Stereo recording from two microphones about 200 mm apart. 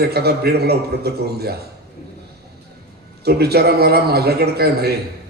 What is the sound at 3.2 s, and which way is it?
A man's voice, 55° right (ahead or behind).